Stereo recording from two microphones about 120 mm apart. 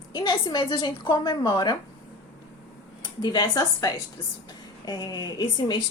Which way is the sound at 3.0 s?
35° left (ahead or behind).